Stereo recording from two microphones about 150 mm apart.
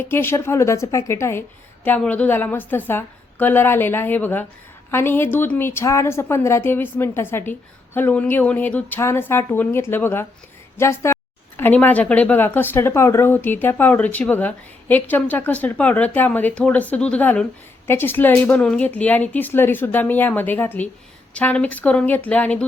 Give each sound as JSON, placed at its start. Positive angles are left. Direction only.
{"t": 0.0, "sound": "a woman's voice", "side_deg": 15}